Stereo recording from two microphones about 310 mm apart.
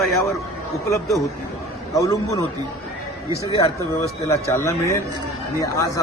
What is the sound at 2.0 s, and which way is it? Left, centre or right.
Speech, centre.